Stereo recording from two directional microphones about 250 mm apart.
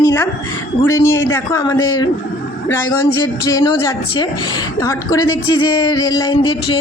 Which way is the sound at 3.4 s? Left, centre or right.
Centre.